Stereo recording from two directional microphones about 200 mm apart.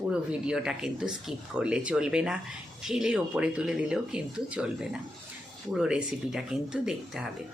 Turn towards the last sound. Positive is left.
turn(degrees=-5)  # may be behind; listen again after turning